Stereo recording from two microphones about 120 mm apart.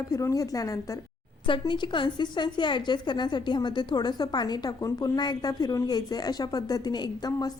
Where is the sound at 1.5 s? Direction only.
40° left (ahead or behind).